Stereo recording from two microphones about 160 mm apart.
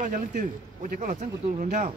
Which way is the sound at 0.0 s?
55° right (ahead or behind).